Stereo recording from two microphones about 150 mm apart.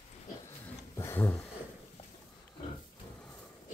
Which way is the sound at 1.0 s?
15° left (ahead or behind).